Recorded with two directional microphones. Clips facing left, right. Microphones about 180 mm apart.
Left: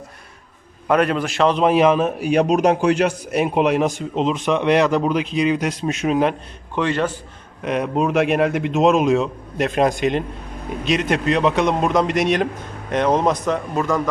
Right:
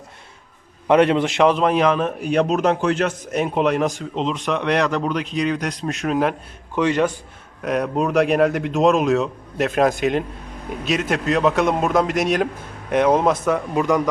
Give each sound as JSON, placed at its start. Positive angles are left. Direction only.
{"t": 0.9, "sound": "a man's voice", "side_deg": -20}
{"t": 1.6, "sound": "a man's voice", "side_deg": 5}
{"t": 6.7, "sound": "a man's voice", "side_deg": -10}
{"t": 7.6, "sound": "a man's voice", "side_deg": 0}